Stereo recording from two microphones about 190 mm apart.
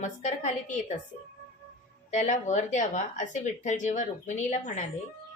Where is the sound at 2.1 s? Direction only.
40° left (ahead or behind).